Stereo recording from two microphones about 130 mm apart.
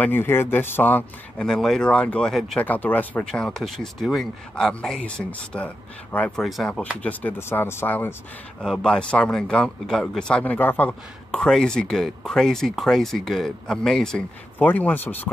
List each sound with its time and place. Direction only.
0.0 s a man's voice: 15° left (ahead or behind)
1.5 s a man's voice: centre (ahead or behind)
2.6 s a man's voice: 15° left (ahead or behind)
8.6 s a man's voice: 5° left (ahead or behind)